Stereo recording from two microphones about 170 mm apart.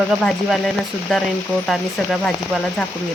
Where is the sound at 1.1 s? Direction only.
Centre (ahead or behind).